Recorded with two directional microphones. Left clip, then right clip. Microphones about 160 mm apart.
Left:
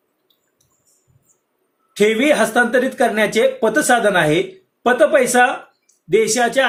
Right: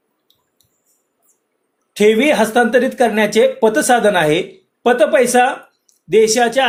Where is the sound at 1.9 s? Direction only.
35° right (ahead or behind).